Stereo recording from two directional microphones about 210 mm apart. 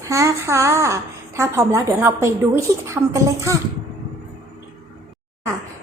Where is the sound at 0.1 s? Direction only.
15° right (ahead or behind).